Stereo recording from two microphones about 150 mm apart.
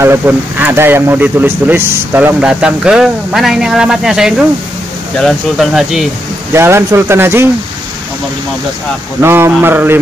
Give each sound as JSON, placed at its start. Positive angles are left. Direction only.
{"t": 0.0, "sound": "speech", "side_deg": -15}
{"t": 6.5, "sound": "speech", "side_deg": -15}
{"t": 9.2, "sound": "speech", "side_deg": -15}